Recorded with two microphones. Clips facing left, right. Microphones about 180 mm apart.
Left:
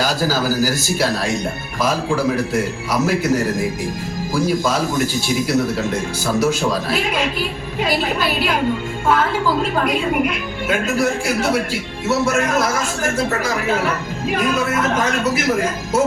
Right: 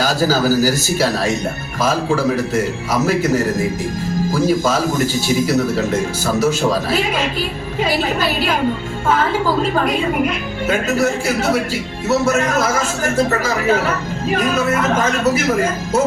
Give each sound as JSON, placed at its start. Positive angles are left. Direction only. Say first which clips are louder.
{"t": 0.0, "sound": "a man's voice", "louder": "right 3 dB", "side_deg": -45}
{"t": 4.3, "sound": "a man's voice", "louder": "right 1 dB", "side_deg": -45}
{"t": 10.7, "sound": "a man's voice", "louder": "right 2 dB", "side_deg": -40}